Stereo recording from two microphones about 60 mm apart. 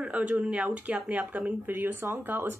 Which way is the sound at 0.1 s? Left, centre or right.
Right.